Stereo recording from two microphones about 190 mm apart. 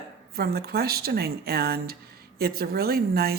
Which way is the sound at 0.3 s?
55° right (ahead or behind).